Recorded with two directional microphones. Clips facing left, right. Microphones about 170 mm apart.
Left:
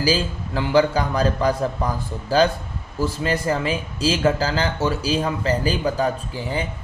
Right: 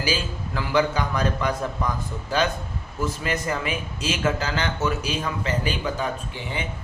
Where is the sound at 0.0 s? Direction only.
30° left (ahead or behind).